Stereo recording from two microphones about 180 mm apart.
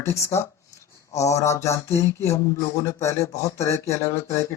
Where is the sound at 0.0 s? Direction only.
15° left (ahead or behind).